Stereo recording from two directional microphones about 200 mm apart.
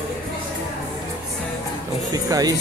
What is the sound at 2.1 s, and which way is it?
Music, 20° right (ahead or behind).